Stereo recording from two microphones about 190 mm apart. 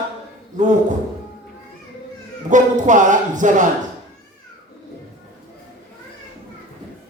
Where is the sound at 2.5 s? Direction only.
40° right (ahead or behind).